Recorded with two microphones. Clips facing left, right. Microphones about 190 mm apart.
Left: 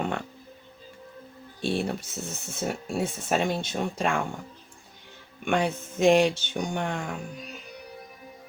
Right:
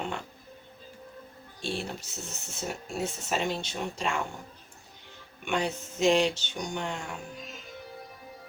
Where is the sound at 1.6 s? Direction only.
55° left (ahead or behind).